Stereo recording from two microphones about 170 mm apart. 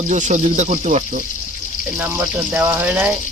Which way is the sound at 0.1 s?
45° right (ahead or behind).